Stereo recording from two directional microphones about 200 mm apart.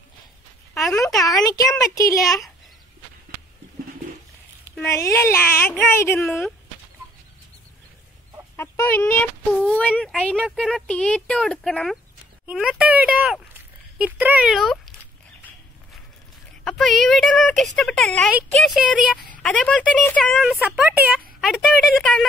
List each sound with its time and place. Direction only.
1.2 s speech: 15° left (ahead or behind)
4.7 s speech: 15° left (ahead or behind)
8.5 s speech: 10° left (ahead or behind)
16.6 s speech: centre (ahead or behind)